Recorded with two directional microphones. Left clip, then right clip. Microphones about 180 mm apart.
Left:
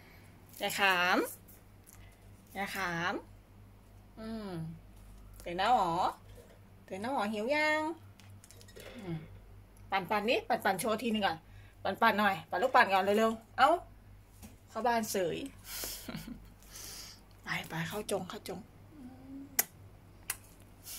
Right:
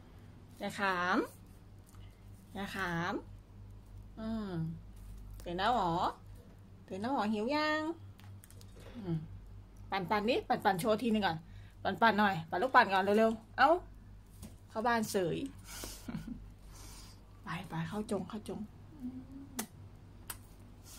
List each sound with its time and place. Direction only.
0.6 s speech: centre (ahead or behind)
2.5 s a woman's voice: 15° right (ahead or behind)
4.2 s a woman's voice: 25° right (ahead or behind)
9.8 s a woman's voice: 25° right (ahead or behind)
16.7 s a sound: 15° right (ahead or behind)